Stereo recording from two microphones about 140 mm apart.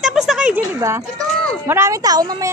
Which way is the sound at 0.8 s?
20° right (ahead or behind).